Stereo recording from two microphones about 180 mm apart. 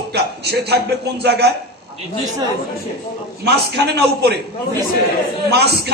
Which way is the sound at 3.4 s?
65° right (ahead or behind).